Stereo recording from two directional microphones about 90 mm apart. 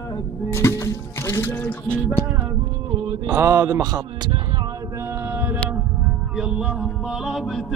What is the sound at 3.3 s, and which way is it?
Mantra, 35° right (ahead or behind).